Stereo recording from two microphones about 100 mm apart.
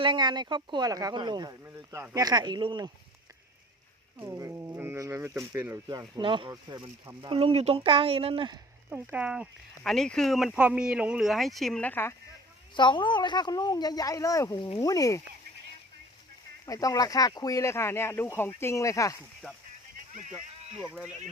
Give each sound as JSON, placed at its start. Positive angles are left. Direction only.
{"t": 0.0, "sound": "speech", "side_deg": -50}
{"t": 1.6, "sound": "speech", "side_deg": -30}
{"t": 4.2, "sound": "speech", "side_deg": -30}
{"t": 4.7, "sound": "speech", "side_deg": -20}
{"t": 4.9, "sound": "speech", "side_deg": -30}
{"t": 6.1, "sound": "speech", "side_deg": -60}
{"t": 6.7, "sound": "speech", "side_deg": -45}
{"t": 7.3, "sound": "speech", "side_deg": -70}
{"t": 8.9, "sound": "speech", "side_deg": -15}
{"t": 9.8, "sound": "speech", "side_deg": 5}
{"t": 11.8, "sound": "speech", "side_deg": 20}
{"t": 12.7, "sound": "speech", "side_deg": 50}
{"t": 16.6, "sound": "speech", "side_deg": 35}